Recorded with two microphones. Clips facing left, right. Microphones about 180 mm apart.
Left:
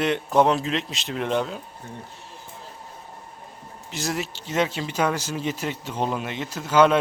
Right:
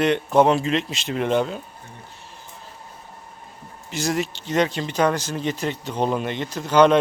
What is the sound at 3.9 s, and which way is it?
Speech, centre (ahead or behind).